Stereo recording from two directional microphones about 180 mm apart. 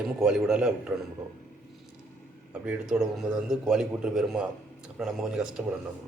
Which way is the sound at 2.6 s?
5° right (ahead or behind).